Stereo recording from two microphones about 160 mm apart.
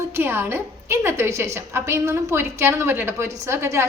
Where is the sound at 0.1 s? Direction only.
15° right (ahead or behind).